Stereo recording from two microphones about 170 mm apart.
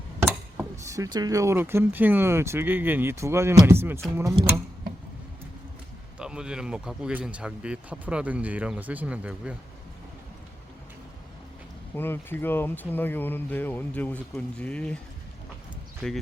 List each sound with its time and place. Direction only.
0.2 s speech: 15° right (ahead or behind)
6.1 s speech: 5° right (ahead or behind)
11.9 s speech: 10° left (ahead or behind)